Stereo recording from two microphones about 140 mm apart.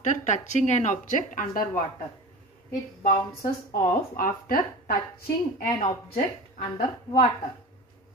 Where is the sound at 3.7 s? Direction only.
90° left.